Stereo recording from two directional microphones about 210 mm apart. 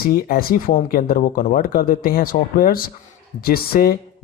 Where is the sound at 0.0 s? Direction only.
45° left (ahead or behind).